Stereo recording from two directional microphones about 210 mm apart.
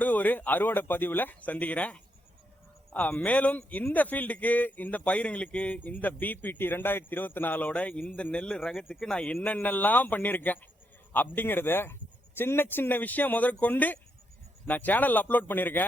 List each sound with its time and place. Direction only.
0.0 s speech: 10° left (ahead or behind)